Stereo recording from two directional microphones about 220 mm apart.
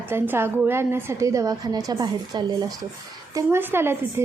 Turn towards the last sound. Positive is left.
turn(degrees=-10)  # may be behind; listen again after turning